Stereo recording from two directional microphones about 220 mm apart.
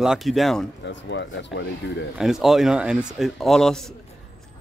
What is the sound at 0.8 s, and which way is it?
Speech, 55° left (ahead or behind).